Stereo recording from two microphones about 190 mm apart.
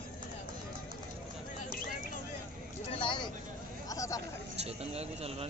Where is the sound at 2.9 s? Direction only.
25° left (ahead or behind).